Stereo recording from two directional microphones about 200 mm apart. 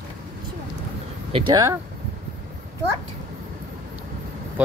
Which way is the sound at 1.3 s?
20° right (ahead or behind).